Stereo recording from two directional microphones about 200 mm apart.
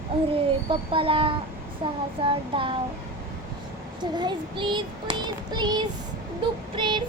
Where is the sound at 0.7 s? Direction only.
25° right (ahead or behind).